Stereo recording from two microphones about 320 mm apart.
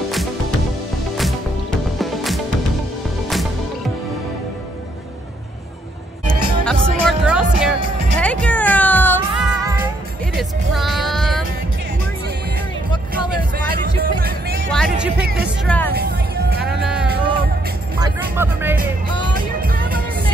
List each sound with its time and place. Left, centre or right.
2.0 s music: centre
6.2 s music: centre
13.7 s music: right
14.7 s music: centre
15.9 s music: right
16.8 s music: centre
18.0 s vehicle: centre
19.3 s music: right